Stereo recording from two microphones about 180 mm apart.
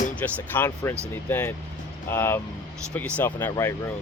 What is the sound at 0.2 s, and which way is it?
Speech, 10° left (ahead or behind).